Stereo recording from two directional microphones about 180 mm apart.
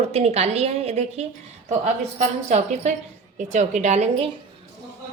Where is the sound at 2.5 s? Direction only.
40° right (ahead or behind).